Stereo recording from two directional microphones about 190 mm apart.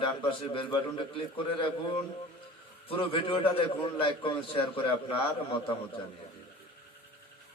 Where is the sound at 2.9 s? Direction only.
30° left (ahead or behind).